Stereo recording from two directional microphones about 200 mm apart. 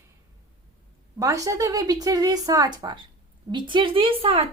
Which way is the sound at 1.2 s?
15° right (ahead or behind).